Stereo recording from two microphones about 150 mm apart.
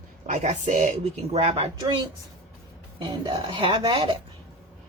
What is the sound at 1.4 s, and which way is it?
Speech, 45° right (ahead or behind).